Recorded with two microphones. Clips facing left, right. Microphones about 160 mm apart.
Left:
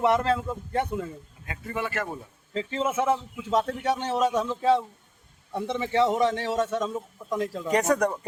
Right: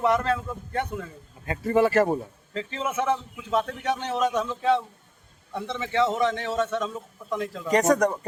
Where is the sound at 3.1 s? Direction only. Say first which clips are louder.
Left 1 dB; 15° left (ahead or behind).